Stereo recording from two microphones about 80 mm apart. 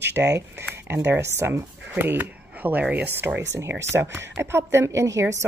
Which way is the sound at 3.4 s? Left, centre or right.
Right.